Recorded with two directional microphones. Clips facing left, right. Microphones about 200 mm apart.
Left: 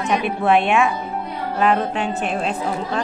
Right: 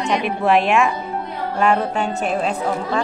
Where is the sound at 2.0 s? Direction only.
40° right (ahead or behind).